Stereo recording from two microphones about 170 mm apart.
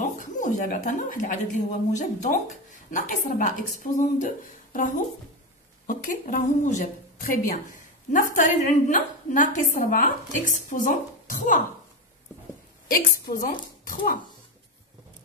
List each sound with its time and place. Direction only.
0.0 s a woman's voice: 50° left (ahead or behind)
12.8 s a woman's voice: 55° left (ahead or behind)